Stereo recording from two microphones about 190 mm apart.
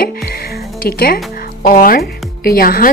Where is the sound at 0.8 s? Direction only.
50° left (ahead or behind).